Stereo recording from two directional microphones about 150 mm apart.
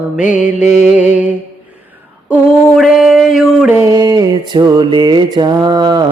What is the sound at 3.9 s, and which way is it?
Mantra, 25° right (ahead or behind).